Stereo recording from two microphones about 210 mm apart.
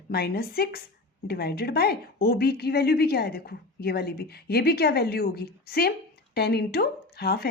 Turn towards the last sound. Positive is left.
turn(degrees=50)  # may be behind; listen again after turning